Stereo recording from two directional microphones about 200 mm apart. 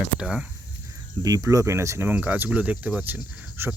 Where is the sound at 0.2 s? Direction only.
5° right (ahead or behind).